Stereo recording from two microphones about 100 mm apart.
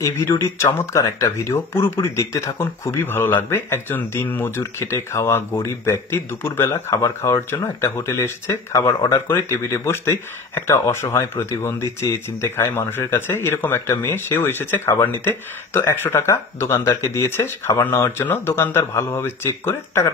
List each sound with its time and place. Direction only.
0.0 s speech: 30° left (ahead or behind)